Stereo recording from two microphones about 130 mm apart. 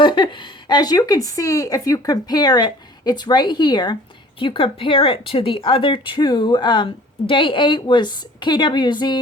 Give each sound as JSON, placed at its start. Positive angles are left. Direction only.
{"t": 0.0, "sound": "speech", "side_deg": 40}